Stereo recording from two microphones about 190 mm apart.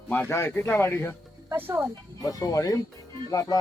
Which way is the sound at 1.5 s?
10° right (ahead or behind).